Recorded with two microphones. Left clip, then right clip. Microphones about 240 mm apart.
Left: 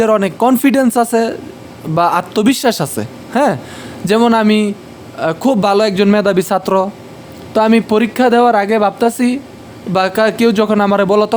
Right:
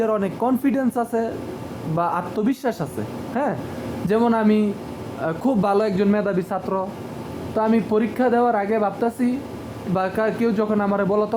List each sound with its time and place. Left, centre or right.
0.0 s speech: left